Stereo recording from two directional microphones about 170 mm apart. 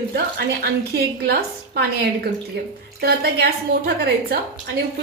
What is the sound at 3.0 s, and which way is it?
A woman's voice, 70° right (ahead or behind).